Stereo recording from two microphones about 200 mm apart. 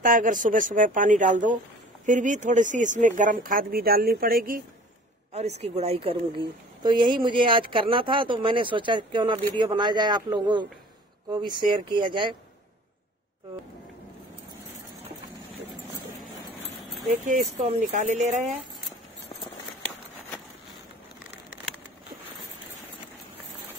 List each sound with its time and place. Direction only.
0.0 s speech: 40° right (ahead or behind)
5.6 s a woman's voice: 30° right (ahead or behind)
17.6 s speech: 35° right (ahead or behind)